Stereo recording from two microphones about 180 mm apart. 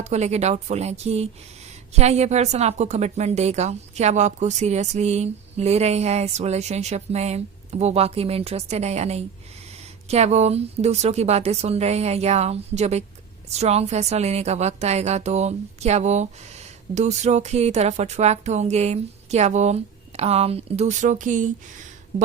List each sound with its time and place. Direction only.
0.0 s a woman's voice: 40° right (ahead or behind)